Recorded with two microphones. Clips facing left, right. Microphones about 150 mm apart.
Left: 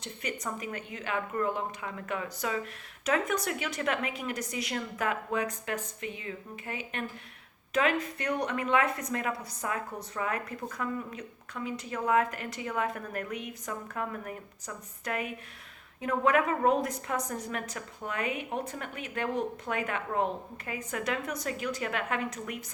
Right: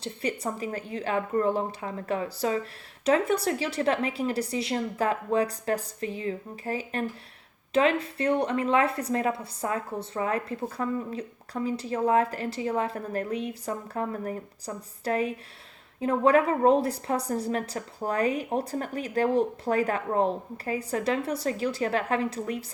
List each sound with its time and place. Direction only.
0.0 s a woman's voice: 30° right (ahead or behind)